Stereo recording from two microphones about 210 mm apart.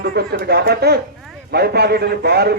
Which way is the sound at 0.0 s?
50° right (ahead or behind).